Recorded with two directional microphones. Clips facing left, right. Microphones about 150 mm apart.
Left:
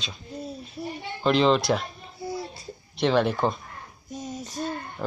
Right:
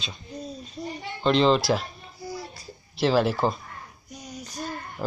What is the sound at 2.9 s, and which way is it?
Speech, centre (ahead or behind).